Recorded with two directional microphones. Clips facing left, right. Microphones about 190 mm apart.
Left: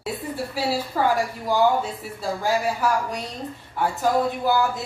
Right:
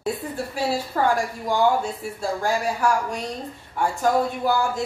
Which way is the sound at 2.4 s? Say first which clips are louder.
Left 1 dB; 5° left (ahead or behind).